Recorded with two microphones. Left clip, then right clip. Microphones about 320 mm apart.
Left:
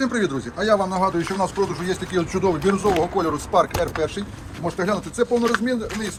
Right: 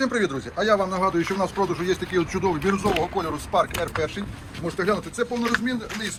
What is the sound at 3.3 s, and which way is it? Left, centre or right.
Speech, centre.